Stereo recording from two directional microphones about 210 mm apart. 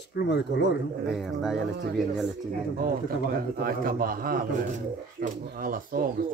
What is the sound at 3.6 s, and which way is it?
Speech, 45° right (ahead or behind).